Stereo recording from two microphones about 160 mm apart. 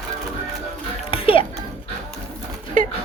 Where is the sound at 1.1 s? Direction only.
35° left (ahead or behind).